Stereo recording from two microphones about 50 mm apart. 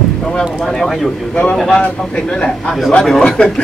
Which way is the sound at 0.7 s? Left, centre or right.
Centre.